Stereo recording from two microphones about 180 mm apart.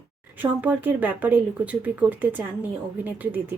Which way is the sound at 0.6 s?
10° right (ahead or behind).